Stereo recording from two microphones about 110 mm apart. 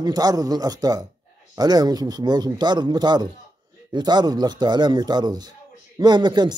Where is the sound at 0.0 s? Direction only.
35° right (ahead or behind).